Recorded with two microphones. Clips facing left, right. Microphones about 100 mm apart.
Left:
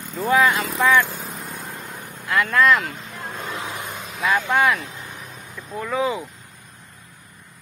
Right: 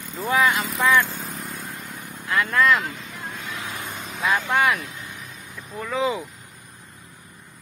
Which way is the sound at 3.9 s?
Centre (ahead or behind).